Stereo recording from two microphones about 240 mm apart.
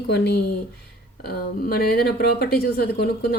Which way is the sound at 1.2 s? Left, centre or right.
Left.